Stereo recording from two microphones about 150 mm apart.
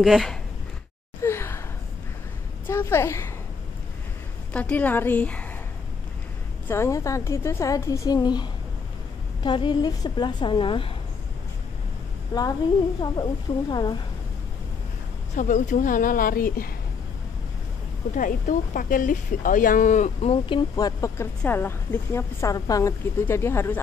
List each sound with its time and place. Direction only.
0.0 s speech: centre (ahead or behind)
1.2 s sigh: 15° left (ahead or behind)
2.7 s a woman's voice: 15° left (ahead or behind)
4.5 s a woman's voice: 10° left (ahead or behind)
6.7 s a woman's voice: 20° left (ahead or behind); by 10.9 s 35° left (ahead or behind)
12.3 s a woman's voice: 20° left (ahead or behind)
13.7 s a woman's voice: 30° left (ahead or behind)
15.3 s speech: 55° left (ahead or behind); by 16.7 s 75° left (ahead or behind)
18.1 s speech: 60° left (ahead or behind); by 20.6 s 40° left (ahead or behind)
20.7 s a woman's voice: 20° left (ahead or behind)